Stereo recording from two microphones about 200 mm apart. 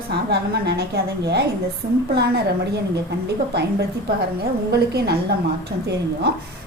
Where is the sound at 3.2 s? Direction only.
55° right (ahead or behind).